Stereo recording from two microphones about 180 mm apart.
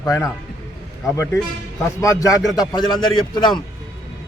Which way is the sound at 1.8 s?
15° left (ahead or behind).